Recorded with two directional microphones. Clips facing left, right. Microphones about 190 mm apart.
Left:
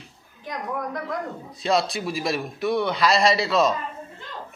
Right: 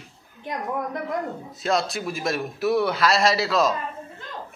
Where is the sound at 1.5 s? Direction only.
Centre (ahead or behind).